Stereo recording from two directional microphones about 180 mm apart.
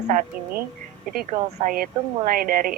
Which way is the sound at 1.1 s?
55° right (ahead or behind).